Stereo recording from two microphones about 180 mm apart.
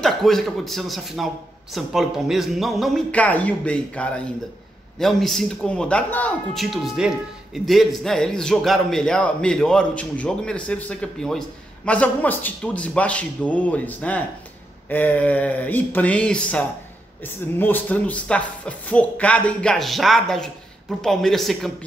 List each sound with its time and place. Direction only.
0.0 s speech: centre (ahead or behind)